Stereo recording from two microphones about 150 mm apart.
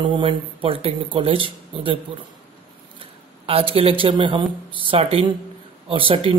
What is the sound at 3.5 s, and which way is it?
Speech, 40° right (ahead or behind).